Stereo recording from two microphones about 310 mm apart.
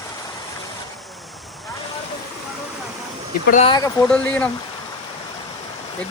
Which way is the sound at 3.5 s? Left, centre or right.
Centre.